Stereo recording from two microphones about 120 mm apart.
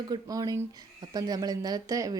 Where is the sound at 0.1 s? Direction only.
30° right (ahead or behind).